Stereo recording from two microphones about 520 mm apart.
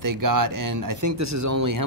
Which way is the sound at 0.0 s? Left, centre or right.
Right.